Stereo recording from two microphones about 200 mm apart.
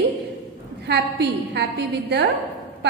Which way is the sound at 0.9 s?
60° right (ahead or behind).